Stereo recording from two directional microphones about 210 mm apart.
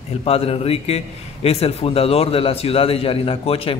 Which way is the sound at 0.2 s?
25° left (ahead or behind).